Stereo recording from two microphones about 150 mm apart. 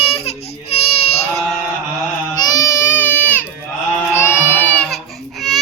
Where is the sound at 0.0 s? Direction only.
40° left (ahead or behind).